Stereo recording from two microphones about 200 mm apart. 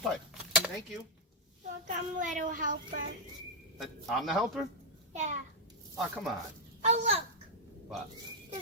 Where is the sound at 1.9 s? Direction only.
40° right (ahead or behind).